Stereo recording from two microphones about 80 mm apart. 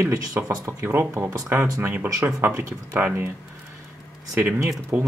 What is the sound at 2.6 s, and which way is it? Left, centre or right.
Speech, right.